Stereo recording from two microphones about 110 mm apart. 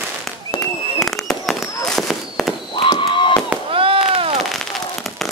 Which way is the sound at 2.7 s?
50° left (ahead or behind).